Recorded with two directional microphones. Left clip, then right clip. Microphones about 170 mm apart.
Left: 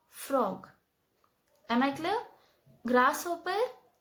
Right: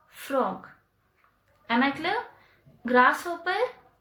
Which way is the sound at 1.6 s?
25° left (ahead or behind).